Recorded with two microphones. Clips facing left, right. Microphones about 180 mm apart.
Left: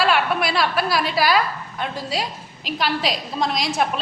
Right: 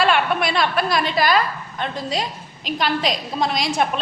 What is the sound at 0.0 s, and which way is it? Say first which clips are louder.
A woman's voice: right 1 dB; 5° left (ahead or behind).